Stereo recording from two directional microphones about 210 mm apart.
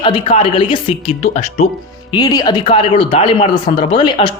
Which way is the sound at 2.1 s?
20° left (ahead or behind).